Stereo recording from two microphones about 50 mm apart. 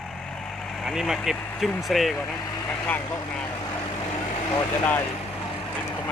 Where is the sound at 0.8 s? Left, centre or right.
Centre.